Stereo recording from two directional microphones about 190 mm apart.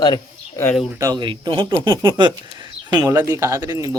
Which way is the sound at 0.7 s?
Centre (ahead or behind).